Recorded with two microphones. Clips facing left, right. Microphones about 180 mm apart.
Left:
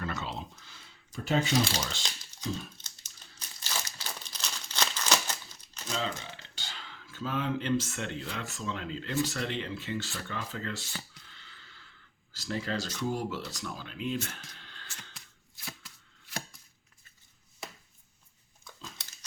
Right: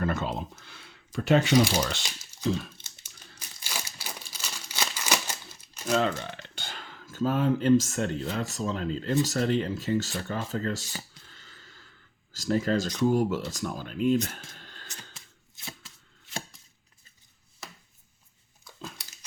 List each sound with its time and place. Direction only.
0.0 s speech: 50° right (ahead or behind)
3.6 s crumpling: 10° right (ahead or behind)
5.9 s speech: 60° right (ahead or behind); by 10.8 s 40° right (ahead or behind)
11.3 s a sound: 40° right (ahead or behind)
12.3 s speech: 45° right (ahead or behind)
14.5 s a sound: 45° right (ahead or behind)
15.1 s chopping: 25° right (ahead or behind)